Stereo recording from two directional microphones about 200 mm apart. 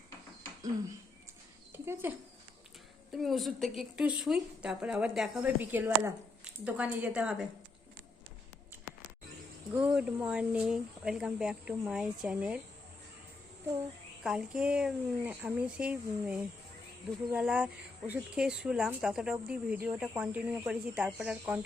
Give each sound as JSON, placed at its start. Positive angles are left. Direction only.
{"t": 1.7, "sound": "a sound", "side_deg": -10}
{"t": 3.1, "sound": "a woman's voice", "side_deg": 0}
{"t": 9.7, "sound": "a woman's voice", "side_deg": -5}
{"t": 14.3, "sound": "a woman's voice", "side_deg": -5}